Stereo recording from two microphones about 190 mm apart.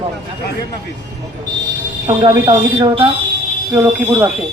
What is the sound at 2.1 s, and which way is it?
Speech, 20° right (ahead or behind).